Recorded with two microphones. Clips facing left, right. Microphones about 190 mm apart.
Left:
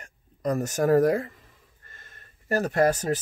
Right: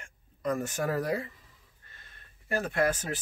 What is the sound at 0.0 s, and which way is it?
Speech, 40° left (ahead or behind).